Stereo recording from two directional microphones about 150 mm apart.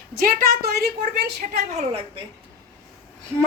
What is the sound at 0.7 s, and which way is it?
Speech, 90° right.